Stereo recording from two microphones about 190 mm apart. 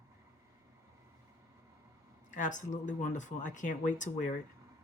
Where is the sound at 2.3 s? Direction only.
40° left (ahead or behind).